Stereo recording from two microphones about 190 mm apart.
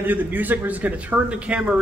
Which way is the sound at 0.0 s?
10° right (ahead or behind).